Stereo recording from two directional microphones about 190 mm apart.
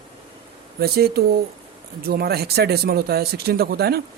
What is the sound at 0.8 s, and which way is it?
Speech, 55° right (ahead or behind).